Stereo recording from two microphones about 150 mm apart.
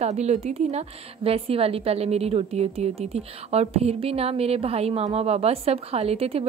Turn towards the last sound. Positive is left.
turn(degrees=-40)  # may be behind; listen again after turning